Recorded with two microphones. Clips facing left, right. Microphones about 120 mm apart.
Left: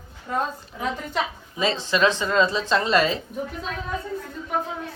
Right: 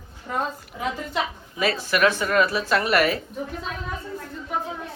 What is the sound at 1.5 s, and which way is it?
Speech, 25° left (ahead or behind).